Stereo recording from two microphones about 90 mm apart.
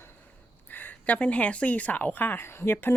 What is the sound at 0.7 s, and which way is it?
A woman's voice, 20° left (ahead or behind).